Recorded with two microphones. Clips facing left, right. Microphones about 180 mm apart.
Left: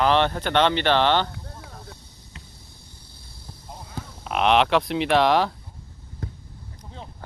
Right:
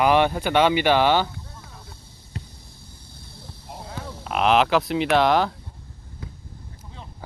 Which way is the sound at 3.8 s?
75° right (ahead or behind).